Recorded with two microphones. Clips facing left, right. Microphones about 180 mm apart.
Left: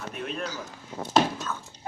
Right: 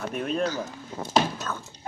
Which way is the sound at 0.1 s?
45° right (ahead or behind).